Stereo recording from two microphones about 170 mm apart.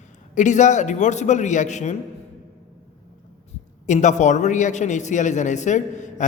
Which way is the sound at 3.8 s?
45° left (ahead or behind).